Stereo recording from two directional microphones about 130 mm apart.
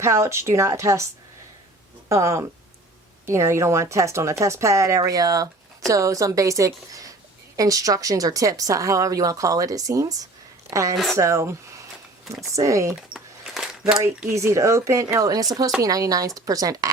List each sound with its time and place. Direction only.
0.0 s a woman's voice: 20° right (ahead or behind)
2.0 s a woman's voice: 25° right (ahead or behind)
10.9 s speech: centre (ahead or behind)
11.2 s a woman's voice: 20° right (ahead or behind)
13.0 s a sound: 5° right (ahead or behind)
14.3 s a woman's voice: 25° right (ahead or behind)